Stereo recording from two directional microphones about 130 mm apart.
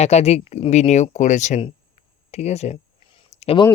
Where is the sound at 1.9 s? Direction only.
60° left (ahead or behind).